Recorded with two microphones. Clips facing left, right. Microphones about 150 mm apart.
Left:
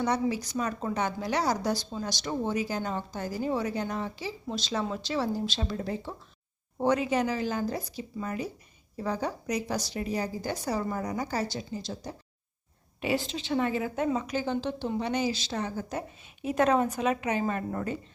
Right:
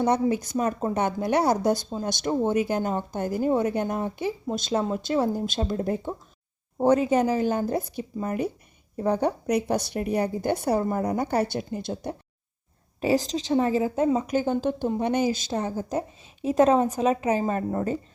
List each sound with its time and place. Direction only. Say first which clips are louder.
0.0 s a woman's voice: right 5 dB; 50° right (ahead or behind)
13.0 s a woman's voice: right 6 dB; 40° right (ahead or behind)
14.3 s a woman's voice: right 6 dB; 50° right (ahead or behind)
16.0 s a woman's voice: right 6 dB; 30° right (ahead or behind)